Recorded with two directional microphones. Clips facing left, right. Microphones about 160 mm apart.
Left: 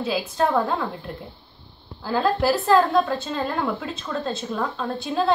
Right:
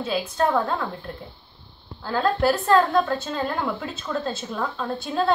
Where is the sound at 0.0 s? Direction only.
Centre (ahead or behind).